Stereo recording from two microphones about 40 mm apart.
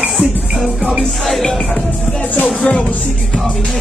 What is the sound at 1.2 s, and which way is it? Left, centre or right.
Speech, centre.